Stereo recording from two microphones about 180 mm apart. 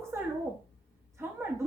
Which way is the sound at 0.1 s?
15° right (ahead or behind).